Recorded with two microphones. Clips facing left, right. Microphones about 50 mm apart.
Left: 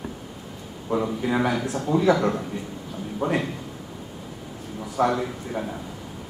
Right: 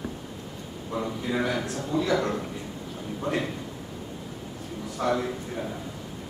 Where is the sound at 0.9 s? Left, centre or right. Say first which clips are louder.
Left 5 dB; left.